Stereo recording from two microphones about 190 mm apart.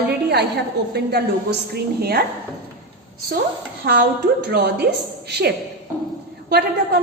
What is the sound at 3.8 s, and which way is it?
A woman's voice, 55° right (ahead or behind).